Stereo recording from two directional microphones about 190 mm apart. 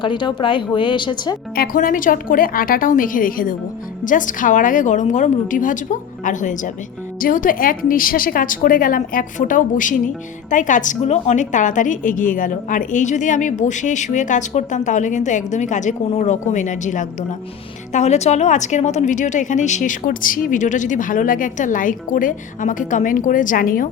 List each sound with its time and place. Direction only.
0.0 s speech: 25° left (ahead or behind)
1.5 s a woman's voice: 50° left (ahead or behind)